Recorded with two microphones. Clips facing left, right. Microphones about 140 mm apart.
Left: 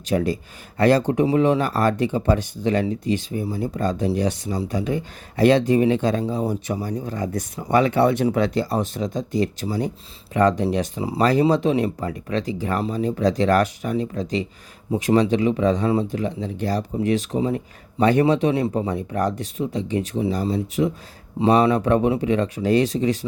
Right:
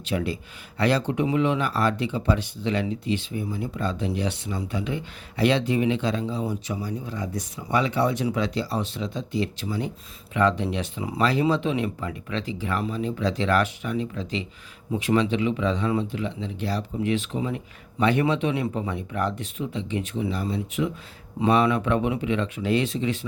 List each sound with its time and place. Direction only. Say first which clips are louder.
0.0 s speech: left 6 dB; 40° left (ahead or behind)